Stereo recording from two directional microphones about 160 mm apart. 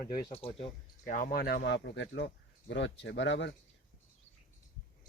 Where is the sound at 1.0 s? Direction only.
60° left (ahead or behind); by 3.5 s 90° left.